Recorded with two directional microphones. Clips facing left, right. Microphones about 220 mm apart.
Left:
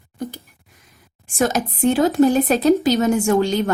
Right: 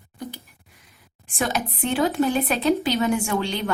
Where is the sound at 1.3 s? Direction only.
45° left (ahead or behind).